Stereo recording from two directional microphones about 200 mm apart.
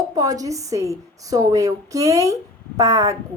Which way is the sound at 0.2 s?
15° right (ahead or behind).